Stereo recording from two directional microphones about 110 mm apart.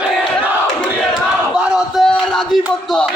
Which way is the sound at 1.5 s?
5° right (ahead or behind).